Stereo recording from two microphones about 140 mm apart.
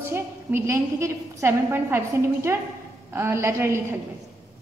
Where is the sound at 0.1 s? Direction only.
15° right (ahead or behind).